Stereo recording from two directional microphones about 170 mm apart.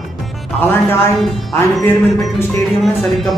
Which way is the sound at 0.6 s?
15° left (ahead or behind).